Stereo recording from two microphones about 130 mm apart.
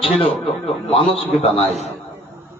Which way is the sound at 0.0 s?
45° left (ahead or behind).